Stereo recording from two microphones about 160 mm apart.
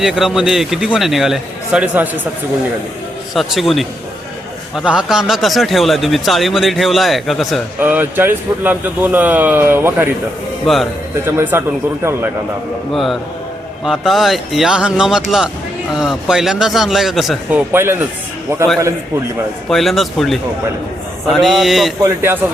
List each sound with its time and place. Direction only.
0.0 s a man's voice: centre (ahead or behind)
3.3 s a man's voice: centre (ahead or behind)
7.8 s speech: 10° right (ahead or behind)
10.7 s a man's voice: centre (ahead or behind)
11.3 s speech: 15° right (ahead or behind)
12.9 s a man's voice: centre (ahead or behind)
17.7 s speech: 15° right (ahead or behind)
19.7 s a man's voice: centre (ahead or behind)
22.0 s speech: 15° right (ahead or behind)